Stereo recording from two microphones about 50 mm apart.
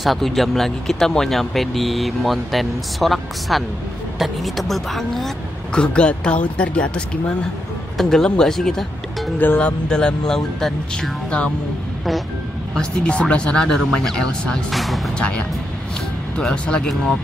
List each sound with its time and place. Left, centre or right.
0.0 s speech: centre
5.7 s speech: centre
8.0 s speech: centre
9.6 s speech: centre
12.7 s speech: centre
14.7 s speech: centre
15.1 s speech: left